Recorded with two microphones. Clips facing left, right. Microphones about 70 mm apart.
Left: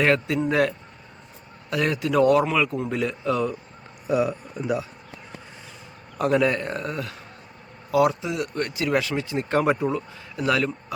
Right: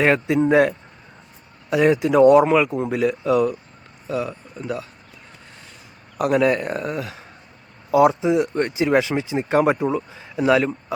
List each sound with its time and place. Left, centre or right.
0.0 s speech: centre
1.7 s speech: centre
2.9 s speech: centre
4.0 s speech: centre
6.1 s speech: centre
7.9 s speech: right